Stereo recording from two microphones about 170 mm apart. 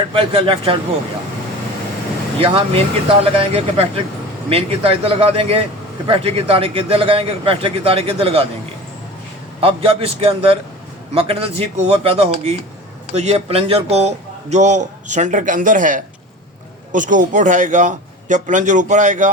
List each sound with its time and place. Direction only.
0.1 s a man's voice: 30° right (ahead or behind)
2.4 s a man's voice: 35° right (ahead or behind)
9.6 s a man's voice: 35° right (ahead or behind)